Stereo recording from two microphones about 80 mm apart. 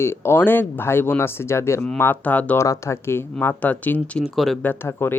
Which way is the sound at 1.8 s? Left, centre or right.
Left.